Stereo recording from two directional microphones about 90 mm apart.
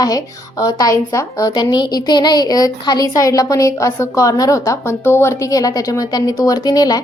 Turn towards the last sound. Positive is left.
turn(degrees=45)  # may be behind; listen again after turning